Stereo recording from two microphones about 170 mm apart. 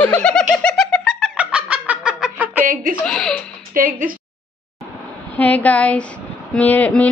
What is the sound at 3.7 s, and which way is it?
Speech, 55° right (ahead or behind).